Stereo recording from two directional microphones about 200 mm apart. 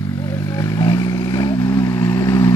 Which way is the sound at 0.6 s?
15° left (ahead or behind).